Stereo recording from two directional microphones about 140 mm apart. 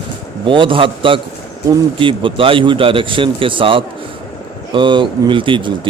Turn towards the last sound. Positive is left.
turn(degrees=-35)  # may be behind; listen again after turning